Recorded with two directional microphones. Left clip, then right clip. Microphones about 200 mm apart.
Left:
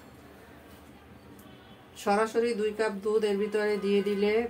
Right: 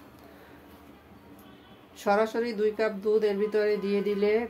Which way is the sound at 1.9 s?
25° right (ahead or behind).